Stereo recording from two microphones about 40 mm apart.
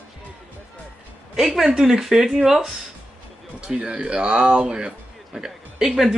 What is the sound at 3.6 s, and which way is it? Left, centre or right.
Speech, right.